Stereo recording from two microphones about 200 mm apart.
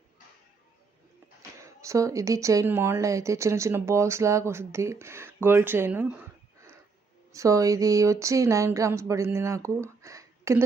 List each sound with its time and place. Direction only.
1.4 s speech: 15° right (ahead or behind)